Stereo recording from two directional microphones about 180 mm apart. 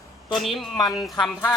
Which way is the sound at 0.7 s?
20° left (ahead or behind).